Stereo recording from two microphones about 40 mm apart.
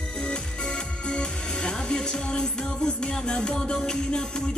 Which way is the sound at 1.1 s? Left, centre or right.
Left.